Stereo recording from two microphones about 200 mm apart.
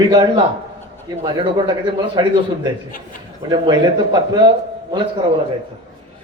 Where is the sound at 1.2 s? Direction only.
20° right (ahead or behind).